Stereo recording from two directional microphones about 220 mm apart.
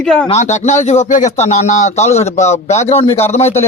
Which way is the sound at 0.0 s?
5° left (ahead or behind).